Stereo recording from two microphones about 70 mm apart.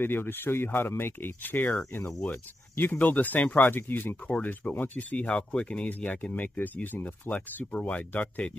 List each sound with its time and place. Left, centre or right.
0.0 s speech: left